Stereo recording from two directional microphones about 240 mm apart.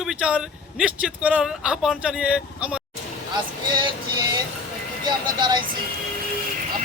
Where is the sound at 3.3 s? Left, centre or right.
Centre.